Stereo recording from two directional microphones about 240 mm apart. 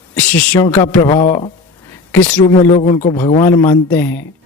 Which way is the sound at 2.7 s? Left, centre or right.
Left.